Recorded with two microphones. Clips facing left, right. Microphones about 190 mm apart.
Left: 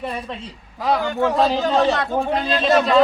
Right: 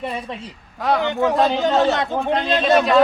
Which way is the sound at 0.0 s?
10° right (ahead or behind).